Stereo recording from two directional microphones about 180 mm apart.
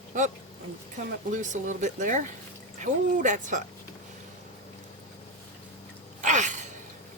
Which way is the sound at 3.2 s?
45° right (ahead or behind).